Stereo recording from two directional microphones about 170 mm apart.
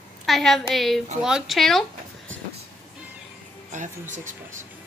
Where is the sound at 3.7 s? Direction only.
45° right (ahead or behind).